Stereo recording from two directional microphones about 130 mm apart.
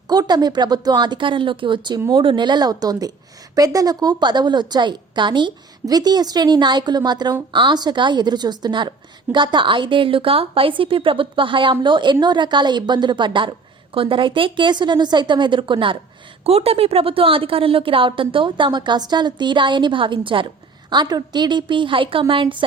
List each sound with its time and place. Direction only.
0.1 s a woman's voice: 30° right (ahead or behind)